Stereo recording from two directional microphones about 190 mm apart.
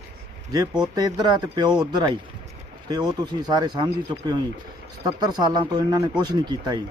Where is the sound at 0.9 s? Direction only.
20° right (ahead or behind).